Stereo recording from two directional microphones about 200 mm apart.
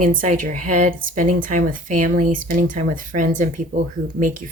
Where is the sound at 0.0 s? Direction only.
40° right (ahead or behind).